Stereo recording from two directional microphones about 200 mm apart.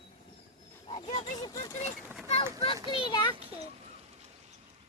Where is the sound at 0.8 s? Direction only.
30° left (ahead or behind).